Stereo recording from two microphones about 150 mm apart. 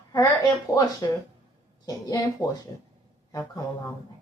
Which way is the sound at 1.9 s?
20° left (ahead or behind).